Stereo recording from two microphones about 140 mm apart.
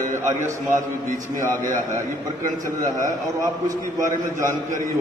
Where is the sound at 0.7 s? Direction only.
65° right (ahead or behind).